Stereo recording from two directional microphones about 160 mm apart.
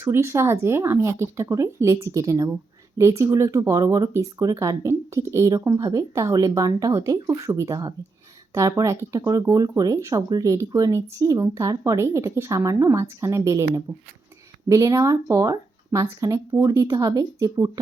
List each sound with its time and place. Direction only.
0.0 s speech: 15° right (ahead or behind)